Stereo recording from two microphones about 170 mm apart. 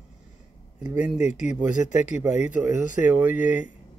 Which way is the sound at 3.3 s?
50° left (ahead or behind).